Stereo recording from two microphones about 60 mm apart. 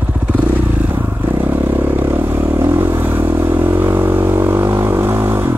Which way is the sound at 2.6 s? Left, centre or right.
Right.